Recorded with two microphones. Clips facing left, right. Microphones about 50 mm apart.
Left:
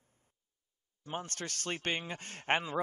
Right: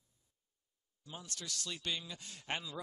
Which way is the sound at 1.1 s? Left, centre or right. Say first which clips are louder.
Left 7 dB; left.